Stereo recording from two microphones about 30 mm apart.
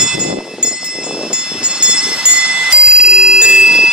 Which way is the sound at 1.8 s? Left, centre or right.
Right.